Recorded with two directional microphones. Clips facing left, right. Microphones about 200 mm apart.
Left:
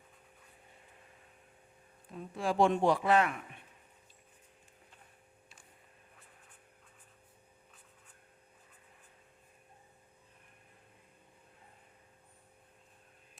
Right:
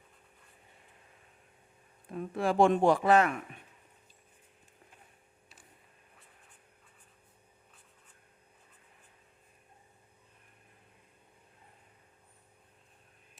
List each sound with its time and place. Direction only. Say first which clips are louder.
2.1 s speech: right 4 dB; 60° right (ahead or behind)